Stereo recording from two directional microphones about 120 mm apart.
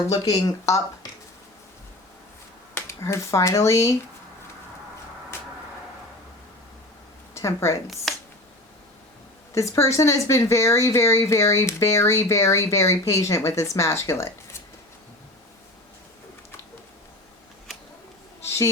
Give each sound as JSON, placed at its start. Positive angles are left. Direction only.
{"t": 0.1, "sound": "speech", "side_deg": 30}
{"t": 2.7, "sound": "speech", "side_deg": 25}
{"t": 7.3, "sound": "a woman's voice", "side_deg": 25}
{"t": 8.1, "sound": "a sound", "side_deg": 0}
{"t": 9.6, "sound": "speech", "side_deg": 25}
{"t": 18.4, "sound": "a sound", "side_deg": 20}